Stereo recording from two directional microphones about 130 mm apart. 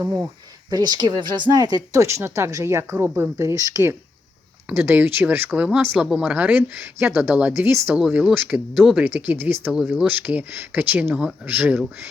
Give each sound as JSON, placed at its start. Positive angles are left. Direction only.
{"t": 0.0, "sound": "speech", "side_deg": -20}
{"t": 0.7, "sound": "speech", "side_deg": -30}
{"t": 4.7, "sound": "speech", "side_deg": -15}
{"t": 7.9, "sound": "speech", "side_deg": -5}